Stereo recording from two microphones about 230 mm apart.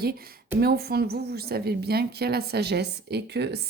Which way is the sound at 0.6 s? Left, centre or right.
Right.